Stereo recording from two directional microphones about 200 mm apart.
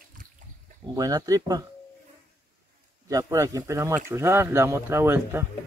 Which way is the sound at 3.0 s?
15° right (ahead or behind).